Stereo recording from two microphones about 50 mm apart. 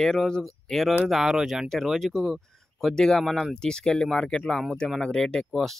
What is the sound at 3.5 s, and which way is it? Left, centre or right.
Speech, centre.